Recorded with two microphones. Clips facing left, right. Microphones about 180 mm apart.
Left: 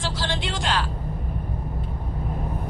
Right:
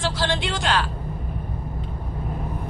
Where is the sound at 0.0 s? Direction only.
60° right (ahead or behind).